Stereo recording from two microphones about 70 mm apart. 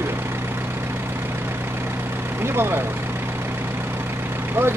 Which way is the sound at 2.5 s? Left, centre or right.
Right.